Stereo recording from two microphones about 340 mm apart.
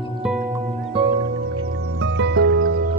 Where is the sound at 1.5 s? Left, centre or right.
Right.